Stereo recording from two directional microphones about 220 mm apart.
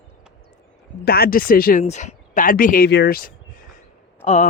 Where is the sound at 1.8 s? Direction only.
30° left (ahead or behind).